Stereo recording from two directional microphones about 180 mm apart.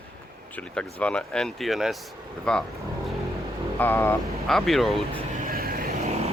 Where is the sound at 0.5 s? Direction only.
5° left (ahead or behind).